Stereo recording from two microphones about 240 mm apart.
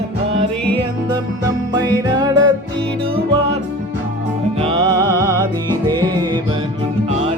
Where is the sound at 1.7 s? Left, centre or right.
Centre.